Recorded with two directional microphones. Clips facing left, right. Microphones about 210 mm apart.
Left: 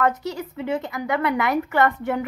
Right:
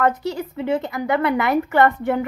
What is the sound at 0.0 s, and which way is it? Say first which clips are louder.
Speech: right 2 dB; 30° right (ahead or behind).